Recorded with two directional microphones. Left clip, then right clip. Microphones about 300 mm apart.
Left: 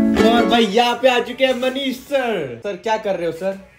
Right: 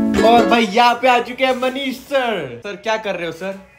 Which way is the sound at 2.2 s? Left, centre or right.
Centre.